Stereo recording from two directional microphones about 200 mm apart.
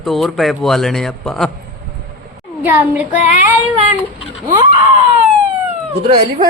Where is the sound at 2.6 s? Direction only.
10° right (ahead or behind).